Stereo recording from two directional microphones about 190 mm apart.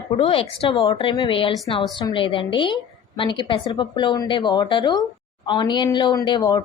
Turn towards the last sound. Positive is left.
turn(degrees=20)  # may be behind; listen again after turning